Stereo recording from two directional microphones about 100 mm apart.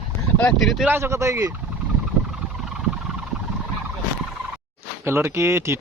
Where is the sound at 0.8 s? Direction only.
25° right (ahead or behind).